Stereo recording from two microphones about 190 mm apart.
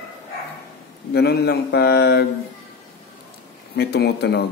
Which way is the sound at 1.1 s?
60° left (ahead or behind).